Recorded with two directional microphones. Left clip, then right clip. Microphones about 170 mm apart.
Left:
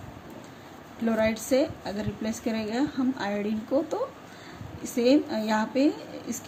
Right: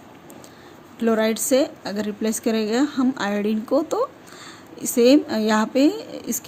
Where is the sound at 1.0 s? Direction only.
50° right (ahead or behind).